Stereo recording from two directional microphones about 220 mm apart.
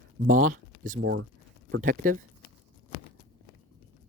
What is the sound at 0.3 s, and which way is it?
Speech, 35° right (ahead or behind).